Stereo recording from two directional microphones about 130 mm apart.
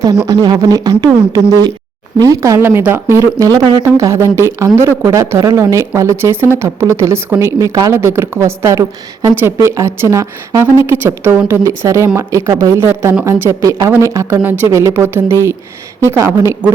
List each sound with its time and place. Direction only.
0.3 s speech: 30° right (ahead or behind)